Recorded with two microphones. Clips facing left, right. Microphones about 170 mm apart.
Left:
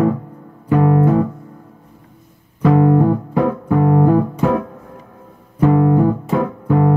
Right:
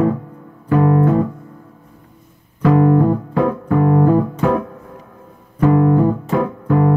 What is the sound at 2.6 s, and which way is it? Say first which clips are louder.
Music: even; 25° left (ahead or behind).